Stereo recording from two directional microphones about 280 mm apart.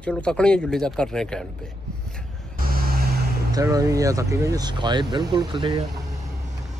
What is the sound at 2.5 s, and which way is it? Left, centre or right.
Vehicle, right.